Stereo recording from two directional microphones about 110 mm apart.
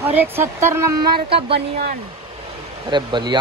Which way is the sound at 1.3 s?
55° right (ahead or behind).